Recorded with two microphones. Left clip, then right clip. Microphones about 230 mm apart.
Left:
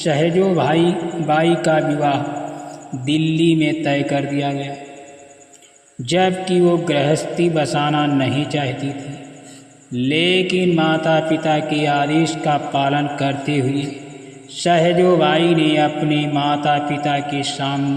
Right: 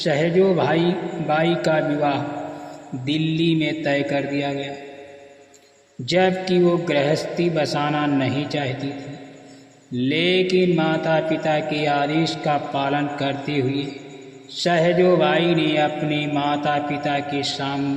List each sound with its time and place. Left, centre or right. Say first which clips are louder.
0.0 s mantra: left 2 dB; left
6.1 s mantra: left 2 dB; left
10.0 s mantra: left 3 dB; left